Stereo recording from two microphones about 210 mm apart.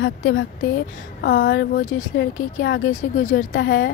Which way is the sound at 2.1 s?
55° left (ahead or behind).